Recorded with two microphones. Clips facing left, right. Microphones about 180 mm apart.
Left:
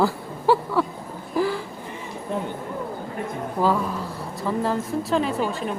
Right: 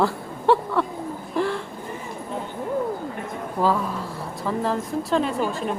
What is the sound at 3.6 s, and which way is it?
Speech, centre (ahead or behind).